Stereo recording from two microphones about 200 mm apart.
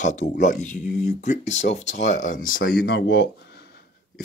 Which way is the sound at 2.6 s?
50° left (ahead or behind).